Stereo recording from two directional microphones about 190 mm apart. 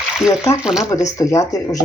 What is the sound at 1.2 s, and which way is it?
Speech, 15° left (ahead or behind).